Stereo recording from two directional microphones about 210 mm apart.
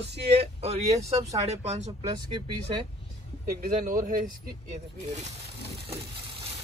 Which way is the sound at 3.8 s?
40° right (ahead or behind).